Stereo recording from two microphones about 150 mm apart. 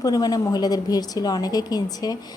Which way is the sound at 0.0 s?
25° left (ahead or behind).